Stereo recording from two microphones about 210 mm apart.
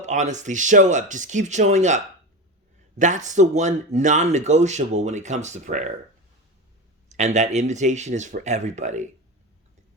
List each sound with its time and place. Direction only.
0.0 s speech: 35° right (ahead or behind)
3.0 s speech: 35° right (ahead or behind)
7.1 s speech: 35° right (ahead or behind)